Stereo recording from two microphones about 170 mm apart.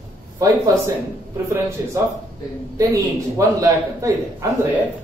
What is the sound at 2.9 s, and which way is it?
A man's voice, 20° right (ahead or behind).